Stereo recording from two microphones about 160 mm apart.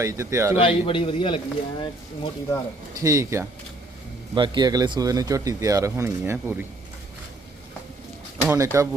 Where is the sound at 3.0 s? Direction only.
20° right (ahead or behind).